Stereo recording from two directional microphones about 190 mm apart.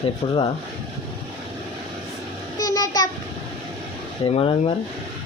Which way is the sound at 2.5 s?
20° left (ahead or behind).